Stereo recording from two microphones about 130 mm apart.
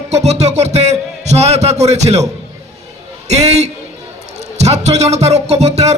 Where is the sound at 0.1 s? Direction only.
60° right (ahead or behind).